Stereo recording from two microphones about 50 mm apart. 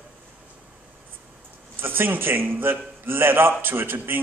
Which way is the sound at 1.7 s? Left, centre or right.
Right.